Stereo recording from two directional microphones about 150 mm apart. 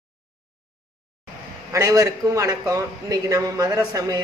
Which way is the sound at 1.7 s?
20° right (ahead or behind).